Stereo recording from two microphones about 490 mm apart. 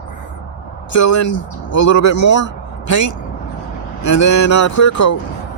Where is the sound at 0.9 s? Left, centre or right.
Left.